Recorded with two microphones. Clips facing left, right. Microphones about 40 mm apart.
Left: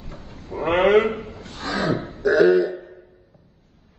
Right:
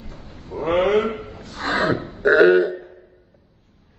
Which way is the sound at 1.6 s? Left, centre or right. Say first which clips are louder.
Right 3 dB; right.